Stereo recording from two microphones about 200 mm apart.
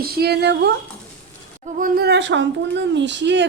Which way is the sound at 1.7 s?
45° right (ahead or behind).